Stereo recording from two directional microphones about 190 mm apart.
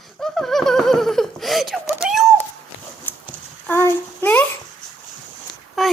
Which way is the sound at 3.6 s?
10° left (ahead or behind).